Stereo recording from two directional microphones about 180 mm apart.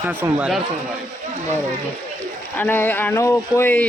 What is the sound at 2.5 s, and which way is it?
Speech, 10° left (ahead or behind).